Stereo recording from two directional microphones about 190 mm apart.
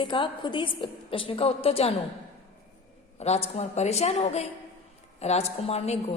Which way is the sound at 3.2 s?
35° left (ahead or behind).